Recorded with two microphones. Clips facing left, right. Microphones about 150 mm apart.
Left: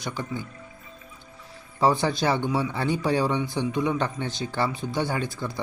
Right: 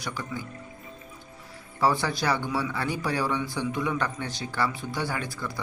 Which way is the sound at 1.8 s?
20° left (ahead or behind).